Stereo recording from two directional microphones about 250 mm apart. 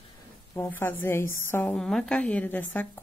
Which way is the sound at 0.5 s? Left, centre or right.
Centre.